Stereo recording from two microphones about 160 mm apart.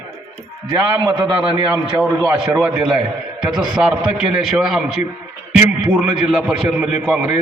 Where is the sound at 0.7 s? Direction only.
25° right (ahead or behind).